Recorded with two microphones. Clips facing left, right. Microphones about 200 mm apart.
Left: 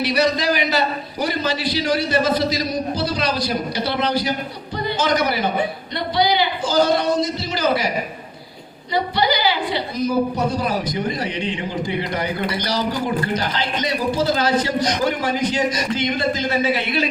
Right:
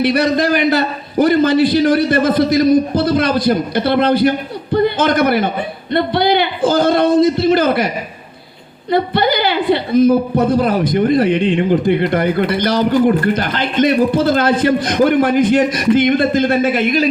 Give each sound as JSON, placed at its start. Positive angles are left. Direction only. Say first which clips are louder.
{"t": 0.0, "sound": "a man's voice", "louder": "right 5 dB", "side_deg": -55}
{"t": 8.9, "sound": "a man's voice", "louder": "right 6 dB", "side_deg": -55}